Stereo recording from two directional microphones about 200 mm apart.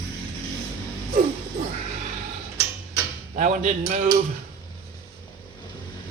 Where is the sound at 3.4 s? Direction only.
35° right (ahead or behind).